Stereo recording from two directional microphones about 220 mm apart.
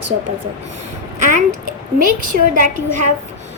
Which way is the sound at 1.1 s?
35° right (ahead or behind).